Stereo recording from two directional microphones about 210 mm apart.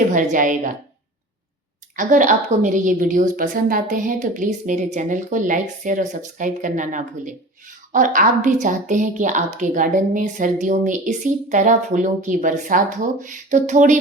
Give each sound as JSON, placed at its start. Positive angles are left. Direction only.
{"t": 0.1, "sound": "a woman's voice", "side_deg": -35}
{"t": 2.0, "sound": "a woman's voice", "side_deg": -35}